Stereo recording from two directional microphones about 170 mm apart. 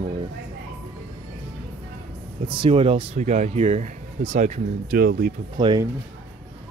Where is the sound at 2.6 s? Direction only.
35° right (ahead or behind).